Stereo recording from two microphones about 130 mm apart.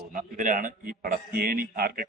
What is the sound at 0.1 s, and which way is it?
A man's voice, 90° right.